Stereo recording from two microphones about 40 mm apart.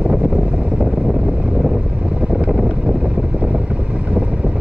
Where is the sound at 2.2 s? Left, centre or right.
Right.